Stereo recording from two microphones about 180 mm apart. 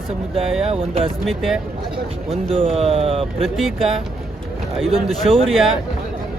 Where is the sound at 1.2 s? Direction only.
Centre (ahead or behind).